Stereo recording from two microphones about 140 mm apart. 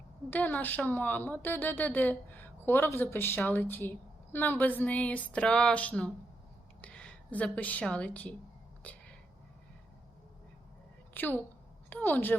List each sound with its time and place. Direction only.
0.3 s a woman's voice: 10° left (ahead or behind)
8.8 s a sound: 10° left (ahead or behind)
11.1 s a woman's voice: 10° left (ahead or behind)